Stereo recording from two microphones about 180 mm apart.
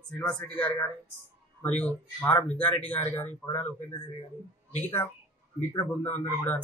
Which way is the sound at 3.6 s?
15° left (ahead or behind).